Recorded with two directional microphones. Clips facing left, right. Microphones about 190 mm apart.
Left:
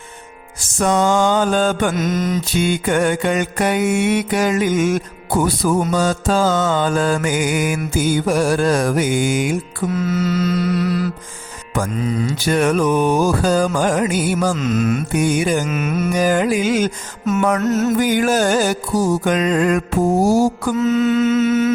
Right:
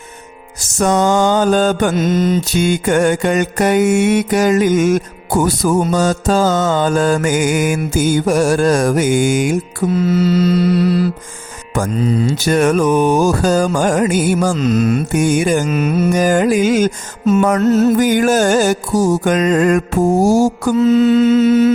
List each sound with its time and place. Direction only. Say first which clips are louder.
0.6 s music: right 2 dB; 40° right (ahead or behind)
1.9 s mantra: right 5 dB; 30° right (ahead or behind)
2.5 s mantra: right 3 dB; 45° right (ahead or behind)
9.9 s mantra: right 5 dB; 30° right (ahead or behind)
11.7 s music: right 4 dB; 35° right (ahead or behind)
12.4 s mantra: right 2 dB; 45° right (ahead or behind)
14.5 s music: right 4 dB; 35° right (ahead or behind)
15.6 s music: right 5 dB; 30° right (ahead or behind)
16.1 s mantra: right 2 dB; 45° right (ahead or behind)
17.2 s mantra: right 5 dB; 30° right (ahead or behind)
17.9 s mantra: right 3 dB; 45° right (ahead or behind)
20.7 s music: right 6 dB; 30° right (ahead or behind)